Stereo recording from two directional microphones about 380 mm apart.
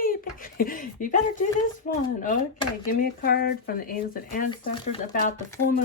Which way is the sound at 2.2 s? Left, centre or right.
Centre.